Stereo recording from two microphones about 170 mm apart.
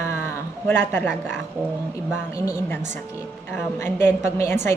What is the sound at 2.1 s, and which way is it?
Speech, 10° right (ahead or behind).